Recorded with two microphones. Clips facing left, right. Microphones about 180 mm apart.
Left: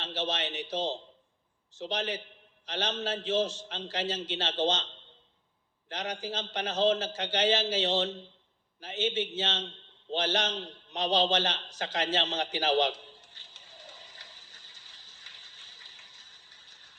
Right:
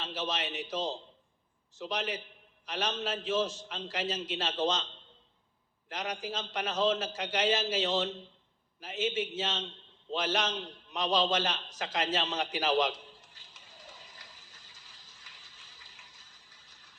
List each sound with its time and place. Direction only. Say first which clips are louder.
0.0 s a man's voice: left 2 dB; 30° left (ahead or behind)
5.9 s a man's voice: left 1 dB; 30° left (ahead or behind)